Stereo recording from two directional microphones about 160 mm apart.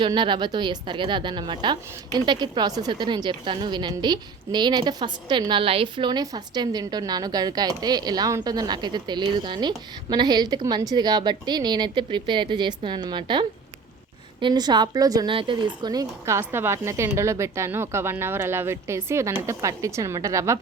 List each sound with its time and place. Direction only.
0.0 s a woman's voice: 30° right (ahead or behind)